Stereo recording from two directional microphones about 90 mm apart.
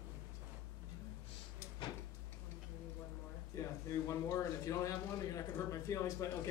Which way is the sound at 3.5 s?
35° left (ahead or behind).